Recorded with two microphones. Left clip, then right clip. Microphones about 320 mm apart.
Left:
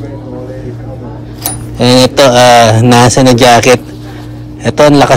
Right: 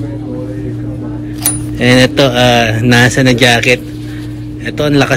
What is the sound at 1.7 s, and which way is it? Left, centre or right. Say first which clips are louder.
A man's voice: left 3 dB; centre.